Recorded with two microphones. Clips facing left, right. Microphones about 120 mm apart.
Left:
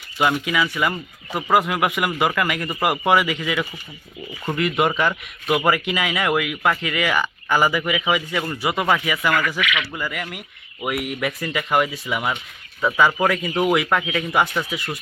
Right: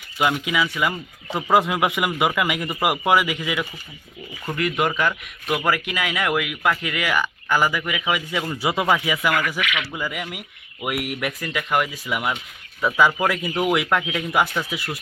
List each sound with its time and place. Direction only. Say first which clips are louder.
0.3 s speech: left 1 dB; 10° right (ahead or behind)
1.5 s speech: even; 20° right (ahead or behind); by 8.2 s centre (ahead or behind)
8.3 s speech: even; 10° right (ahead or behind)